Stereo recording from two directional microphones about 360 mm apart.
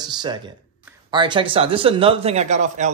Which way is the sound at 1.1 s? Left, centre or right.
Centre.